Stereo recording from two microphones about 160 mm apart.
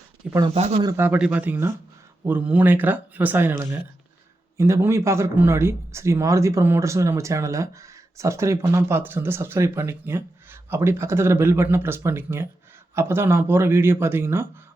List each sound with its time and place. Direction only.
0.5 s speech: 45° right (ahead or behind)
0.8 s speech: 15° right (ahead or behind)